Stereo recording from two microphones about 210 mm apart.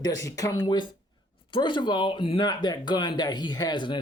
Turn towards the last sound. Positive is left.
turn(degrees=20)  # may be behind; listen again after turning